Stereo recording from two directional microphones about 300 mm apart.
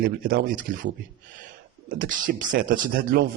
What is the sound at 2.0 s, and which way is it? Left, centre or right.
Speech, right.